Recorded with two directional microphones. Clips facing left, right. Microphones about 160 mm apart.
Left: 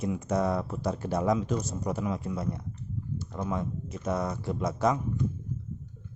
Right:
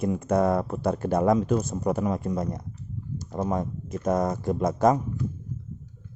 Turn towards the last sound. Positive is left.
turn(degrees=-50)  # may be behind; listen again after turning